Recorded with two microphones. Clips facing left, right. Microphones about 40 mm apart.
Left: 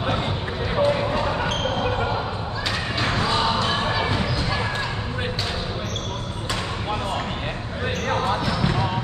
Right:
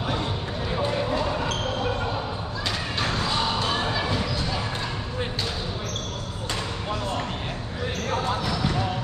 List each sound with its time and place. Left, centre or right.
0.7 s a sound: left
3.2 s basketball bounce: left
8.1 s basketball bounce: left